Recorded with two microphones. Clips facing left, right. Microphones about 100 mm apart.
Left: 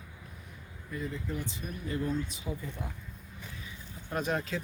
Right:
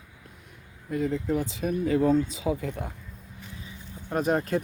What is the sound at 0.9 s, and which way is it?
Speech, 85° right.